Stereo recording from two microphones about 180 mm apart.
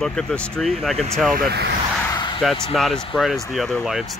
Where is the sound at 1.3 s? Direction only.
60° right (ahead or behind).